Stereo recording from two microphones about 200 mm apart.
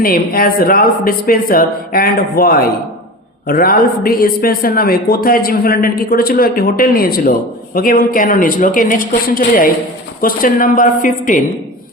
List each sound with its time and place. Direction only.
0.0 s a man's voice: 45° left (ahead or behind)